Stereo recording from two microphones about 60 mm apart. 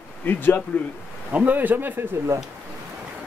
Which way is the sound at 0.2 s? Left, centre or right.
Left.